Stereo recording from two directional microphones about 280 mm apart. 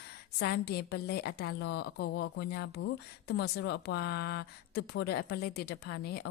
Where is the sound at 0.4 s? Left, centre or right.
Left.